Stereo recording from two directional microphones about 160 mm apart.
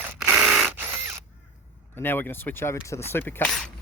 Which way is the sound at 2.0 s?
10° left (ahead or behind).